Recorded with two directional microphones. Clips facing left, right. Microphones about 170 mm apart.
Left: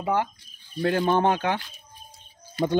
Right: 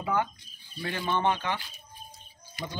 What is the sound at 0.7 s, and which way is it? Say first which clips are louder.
Speech: left 9 dB; 50° left (ahead or behind).